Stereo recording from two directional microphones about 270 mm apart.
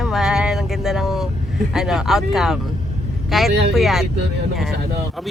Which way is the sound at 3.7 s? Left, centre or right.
Centre.